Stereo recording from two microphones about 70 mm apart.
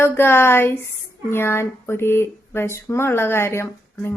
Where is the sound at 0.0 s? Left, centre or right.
Left.